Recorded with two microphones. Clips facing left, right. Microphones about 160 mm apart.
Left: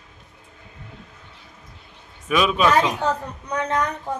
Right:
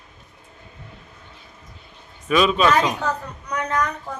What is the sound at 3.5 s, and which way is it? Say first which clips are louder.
Speech: left 1 dB; 30° left (ahead or behind).